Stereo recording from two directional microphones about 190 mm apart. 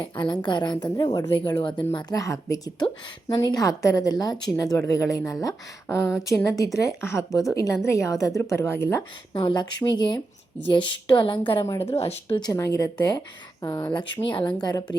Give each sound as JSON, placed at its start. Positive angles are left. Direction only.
{"t": 0.0, "sound": "a woman's voice", "side_deg": 25}
{"t": 9.3, "sound": "a woman's voice", "side_deg": 25}
{"t": 12.5, "sound": "a woman's voice", "side_deg": 15}
{"t": 13.7, "sound": "a woman's voice", "side_deg": 10}
{"t": 13.9, "sound": "a woman's voice", "side_deg": 25}